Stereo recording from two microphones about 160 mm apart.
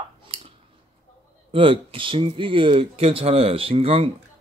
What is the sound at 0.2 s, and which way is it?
Scissors, 35° right (ahead or behind).